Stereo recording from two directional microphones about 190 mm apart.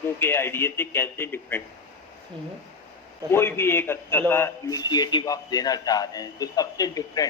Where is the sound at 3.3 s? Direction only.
10° left (ahead or behind).